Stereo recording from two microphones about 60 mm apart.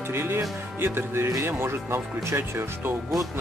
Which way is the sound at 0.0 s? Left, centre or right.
Right.